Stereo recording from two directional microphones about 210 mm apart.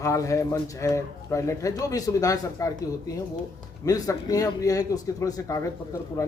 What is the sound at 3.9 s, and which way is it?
Speech, 15° left (ahead or behind).